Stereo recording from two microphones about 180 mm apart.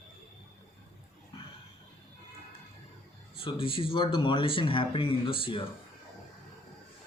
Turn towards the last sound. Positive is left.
turn(degrees=30)  # may be behind; listen again after turning